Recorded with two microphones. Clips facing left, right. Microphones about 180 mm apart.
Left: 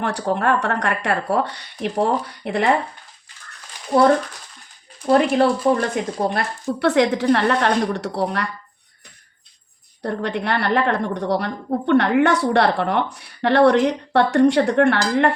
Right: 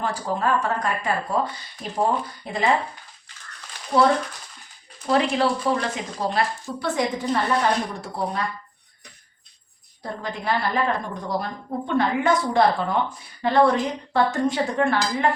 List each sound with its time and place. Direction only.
0.0 s a woman's voice: 70° left (ahead or behind)
5.0 s speech: 50° left (ahead or behind)
6.2 s a woman's voice: 60° left (ahead or behind)
10.0 s a woman's voice: 70° left (ahead or behind)